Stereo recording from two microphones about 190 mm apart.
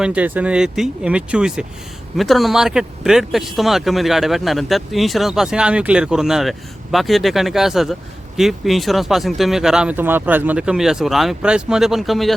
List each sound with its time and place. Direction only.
0.0 s speech: 5° right (ahead or behind)